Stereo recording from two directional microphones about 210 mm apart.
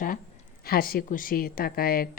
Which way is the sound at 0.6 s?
45° left (ahead or behind).